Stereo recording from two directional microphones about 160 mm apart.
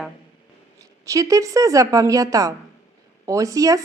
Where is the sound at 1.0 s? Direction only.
20° right (ahead or behind).